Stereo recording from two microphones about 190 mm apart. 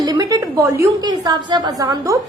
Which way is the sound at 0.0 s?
20° right (ahead or behind).